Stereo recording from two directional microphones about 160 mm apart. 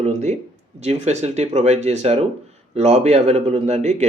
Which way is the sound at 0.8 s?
45° right (ahead or behind).